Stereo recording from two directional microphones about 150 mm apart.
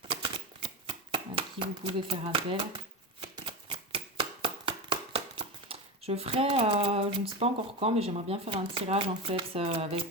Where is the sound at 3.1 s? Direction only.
35° right (ahead or behind).